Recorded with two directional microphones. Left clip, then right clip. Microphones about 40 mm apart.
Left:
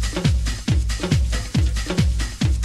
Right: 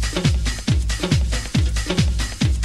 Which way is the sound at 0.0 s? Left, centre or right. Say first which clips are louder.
Right 2 dB; left.